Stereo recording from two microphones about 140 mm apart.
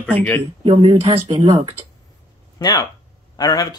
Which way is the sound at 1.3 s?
25° right (ahead or behind).